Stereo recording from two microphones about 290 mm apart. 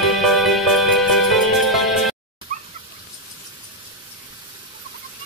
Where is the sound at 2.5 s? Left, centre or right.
Right.